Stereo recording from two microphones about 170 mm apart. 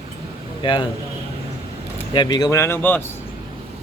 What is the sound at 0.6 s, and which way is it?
Speech, 30° left (ahead or behind).